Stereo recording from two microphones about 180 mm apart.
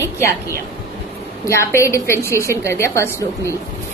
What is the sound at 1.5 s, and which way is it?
A woman's voice, 15° left (ahead or behind).